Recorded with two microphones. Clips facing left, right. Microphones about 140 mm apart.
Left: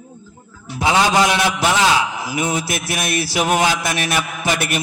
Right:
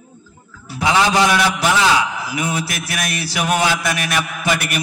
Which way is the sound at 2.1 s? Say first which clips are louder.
Left 1 dB; 30° left (ahead or behind).